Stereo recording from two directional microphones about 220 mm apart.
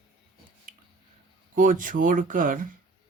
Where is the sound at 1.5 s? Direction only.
40° right (ahead or behind).